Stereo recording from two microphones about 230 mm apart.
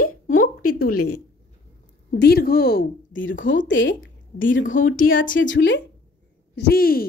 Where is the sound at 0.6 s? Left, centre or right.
Left.